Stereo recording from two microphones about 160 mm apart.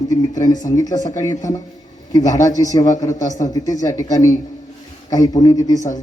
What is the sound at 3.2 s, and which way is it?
Speech, 50° left (ahead or behind).